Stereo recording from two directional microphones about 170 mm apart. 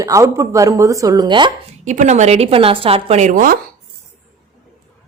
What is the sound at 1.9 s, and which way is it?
A woman's voice, 45° right (ahead or behind).